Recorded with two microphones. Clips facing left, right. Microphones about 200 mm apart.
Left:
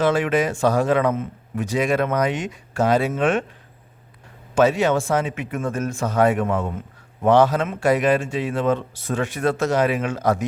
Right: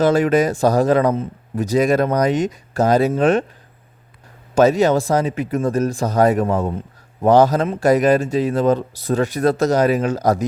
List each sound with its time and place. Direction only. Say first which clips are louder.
0.0 s speech: right 4 dB; 40° right (ahead or behind)
4.5 s speech: right 4 dB; 40° right (ahead or behind)